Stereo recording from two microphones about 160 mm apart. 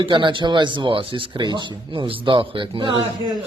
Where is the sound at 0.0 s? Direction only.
30° right (ahead or behind).